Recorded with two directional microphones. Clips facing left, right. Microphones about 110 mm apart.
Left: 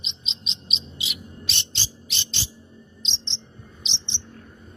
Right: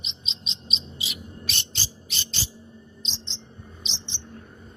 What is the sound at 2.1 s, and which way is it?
Music, 40° right (ahead or behind).